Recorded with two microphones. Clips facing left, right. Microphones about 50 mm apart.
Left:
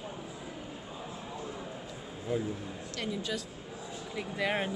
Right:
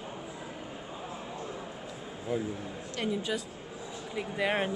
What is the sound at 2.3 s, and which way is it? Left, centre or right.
Speech, centre.